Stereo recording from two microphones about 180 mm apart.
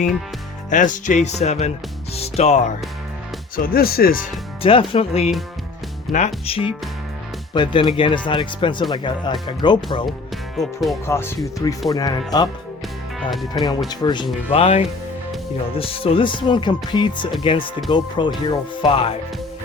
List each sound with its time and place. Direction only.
0.7 s speech: 45° left (ahead or behind)
3.5 s speech: 55° left (ahead or behind)
4.6 s speech: 30° left (ahead or behind)
10.6 s speech: centre (ahead or behind)
11.0 s speech: 15° left (ahead or behind)
13.1 s speech: centre (ahead or behind)
13.5 s speech: 20° left (ahead or behind)
14.5 s speech: 35° left (ahead or behind)